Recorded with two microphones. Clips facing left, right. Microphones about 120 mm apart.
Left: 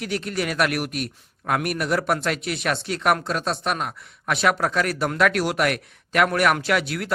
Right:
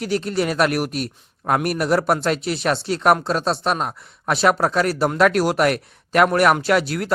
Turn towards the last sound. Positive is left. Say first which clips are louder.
# right 4 dB
turn(degrees=-40)  # may be behind; listen again after turning